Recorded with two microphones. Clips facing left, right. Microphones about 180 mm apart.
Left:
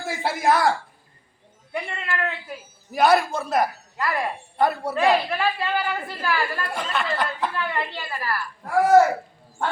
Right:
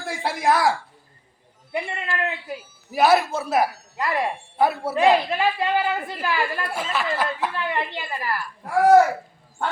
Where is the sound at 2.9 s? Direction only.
5° right (ahead or behind).